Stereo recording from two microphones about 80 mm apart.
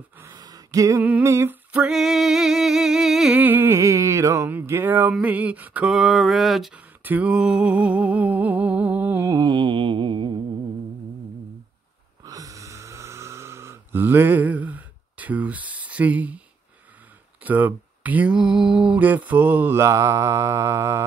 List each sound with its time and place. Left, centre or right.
0.3 s a sound: right
1.2 s mantra: right
1.5 s music: centre
3.3 s mantra: right
3.7 s mantra: right
4.6 s mantra: right
5.9 s a sound: centre
7.0 s a sound: right
9.4 s mantra: right
12.3 s snoring: right; by 16.3 s centre
17.4 s mantra: right
19.8 s mantra: right